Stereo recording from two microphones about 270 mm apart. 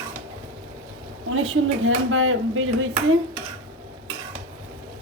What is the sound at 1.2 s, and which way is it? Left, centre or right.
Speech, right.